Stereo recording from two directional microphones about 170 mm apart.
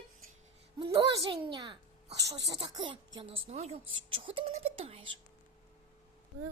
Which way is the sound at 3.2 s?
35° right (ahead or behind).